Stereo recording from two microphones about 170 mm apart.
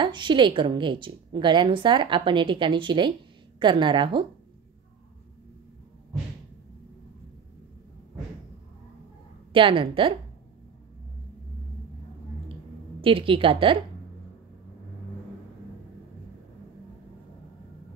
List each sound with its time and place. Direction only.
0.0 s a woman's voice: 25° right (ahead or behind)
9.5 s a woman's voice: 30° right (ahead or behind)
13.0 s a woman's voice: 30° right (ahead or behind)